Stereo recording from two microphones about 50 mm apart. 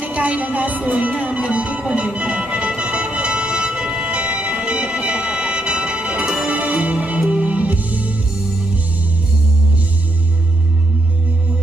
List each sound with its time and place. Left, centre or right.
0.0 s music: right